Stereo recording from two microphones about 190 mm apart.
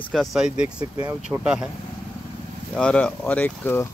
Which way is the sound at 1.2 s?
5° right (ahead or behind).